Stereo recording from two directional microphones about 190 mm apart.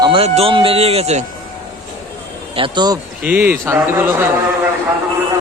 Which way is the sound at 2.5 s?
25° right (ahead or behind).